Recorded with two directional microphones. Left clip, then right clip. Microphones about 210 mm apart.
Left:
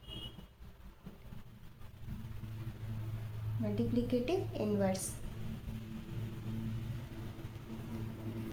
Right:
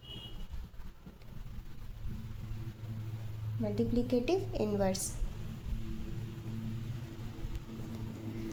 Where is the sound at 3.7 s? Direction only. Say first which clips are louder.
Right 3 dB; 50° right (ahead or behind).